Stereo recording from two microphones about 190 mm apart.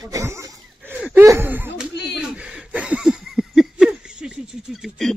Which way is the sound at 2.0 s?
60° left (ahead or behind).